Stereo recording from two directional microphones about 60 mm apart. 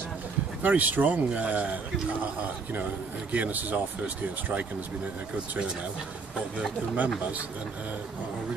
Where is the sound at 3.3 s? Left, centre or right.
Right.